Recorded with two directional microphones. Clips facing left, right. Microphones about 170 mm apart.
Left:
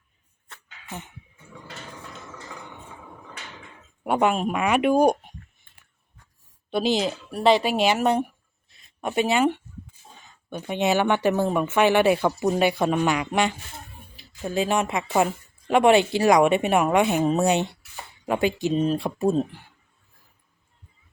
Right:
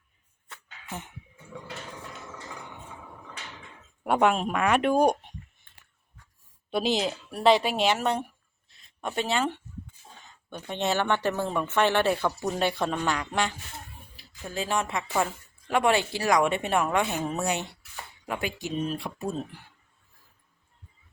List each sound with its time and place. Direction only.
0.5 s a sound: 5° right (ahead or behind)
4.0 s speech: centre (ahead or behind)
6.7 s a woman's voice: centre (ahead or behind); by 19.5 s 35° left (ahead or behind)